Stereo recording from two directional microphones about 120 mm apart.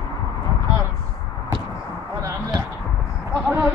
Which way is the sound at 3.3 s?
15° right (ahead or behind).